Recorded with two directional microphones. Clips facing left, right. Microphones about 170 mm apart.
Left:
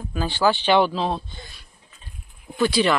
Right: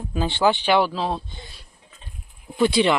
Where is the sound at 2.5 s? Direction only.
25° right (ahead or behind).